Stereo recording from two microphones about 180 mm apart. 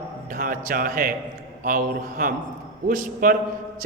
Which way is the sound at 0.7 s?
50° right (ahead or behind).